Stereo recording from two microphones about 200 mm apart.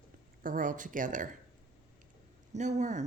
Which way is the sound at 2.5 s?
35° right (ahead or behind).